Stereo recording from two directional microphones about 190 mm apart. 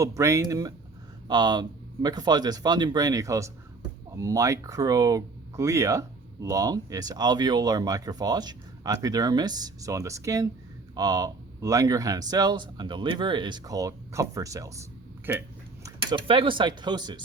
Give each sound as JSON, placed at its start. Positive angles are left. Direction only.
{"t": 0.0, "sound": "speech", "side_deg": -15}
{"t": 15.8, "sound": "speech", "side_deg": -25}